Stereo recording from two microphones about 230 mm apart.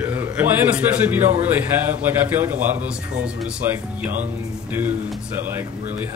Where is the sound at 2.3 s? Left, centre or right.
Centre.